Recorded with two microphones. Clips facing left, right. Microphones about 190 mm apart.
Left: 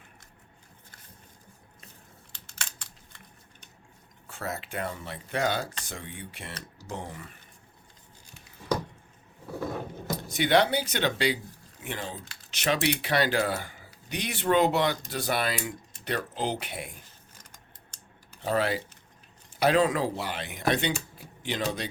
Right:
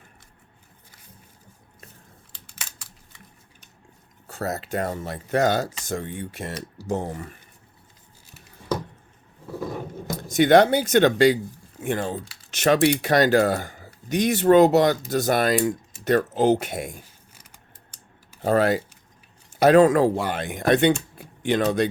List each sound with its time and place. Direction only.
2.5 s computer keyboard: 5° right (ahead or behind)
4.3 s speech: 40° right (ahead or behind)
10.2 s speech: 45° right (ahead or behind)
17.0 s scissors: 10° right (ahead or behind)
18.4 s speech: 45° right (ahead or behind)